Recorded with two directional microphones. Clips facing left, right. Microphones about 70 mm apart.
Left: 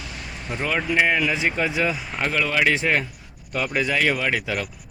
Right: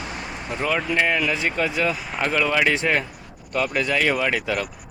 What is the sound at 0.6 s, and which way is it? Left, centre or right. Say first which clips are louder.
Speech: left 1 dB; centre.